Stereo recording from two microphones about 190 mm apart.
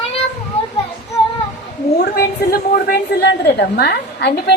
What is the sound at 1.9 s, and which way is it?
A woman's voice, 55° left (ahead or behind).